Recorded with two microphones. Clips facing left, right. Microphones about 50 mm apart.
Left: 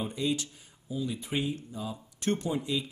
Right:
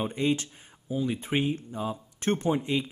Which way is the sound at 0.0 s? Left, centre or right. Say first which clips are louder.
Right 4 dB; right.